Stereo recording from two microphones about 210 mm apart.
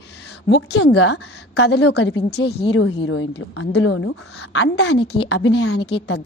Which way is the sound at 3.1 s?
60° left (ahead or behind).